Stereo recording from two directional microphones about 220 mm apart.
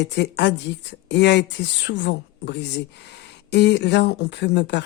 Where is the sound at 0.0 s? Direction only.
50° left (ahead or behind).